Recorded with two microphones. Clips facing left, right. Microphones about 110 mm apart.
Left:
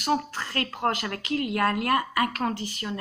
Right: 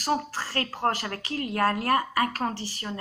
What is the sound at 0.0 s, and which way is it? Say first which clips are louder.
Speech: left 1 dB; 35° right (ahead or behind).